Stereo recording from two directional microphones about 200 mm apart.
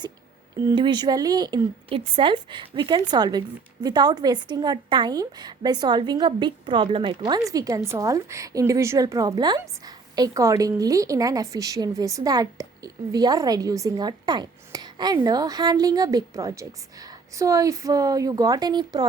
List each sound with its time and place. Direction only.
0.7 s a woman's voice: 20° right (ahead or behind)